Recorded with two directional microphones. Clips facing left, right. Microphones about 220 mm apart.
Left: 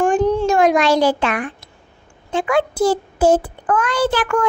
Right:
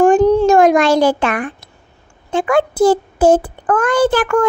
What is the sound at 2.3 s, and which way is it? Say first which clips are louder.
A child's voice: right 3 dB; 50° right (ahead or behind).